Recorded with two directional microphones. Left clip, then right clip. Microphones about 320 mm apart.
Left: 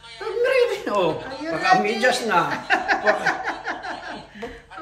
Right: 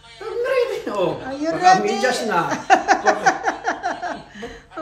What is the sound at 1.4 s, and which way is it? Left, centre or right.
A man's voice, centre.